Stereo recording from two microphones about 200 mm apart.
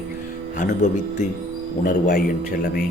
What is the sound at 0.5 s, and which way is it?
A man's voice, 40° left (ahead or behind).